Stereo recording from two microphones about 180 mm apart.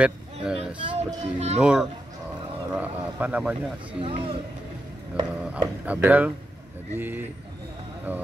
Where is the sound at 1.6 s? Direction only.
5° right (ahead or behind).